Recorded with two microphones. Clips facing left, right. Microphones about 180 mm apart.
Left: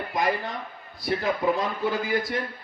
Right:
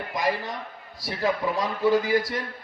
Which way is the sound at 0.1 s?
55° left (ahead or behind).